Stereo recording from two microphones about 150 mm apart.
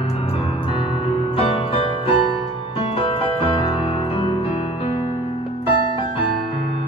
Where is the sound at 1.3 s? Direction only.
40° left (ahead or behind).